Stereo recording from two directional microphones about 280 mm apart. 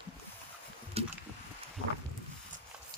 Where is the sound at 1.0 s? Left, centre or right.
Right.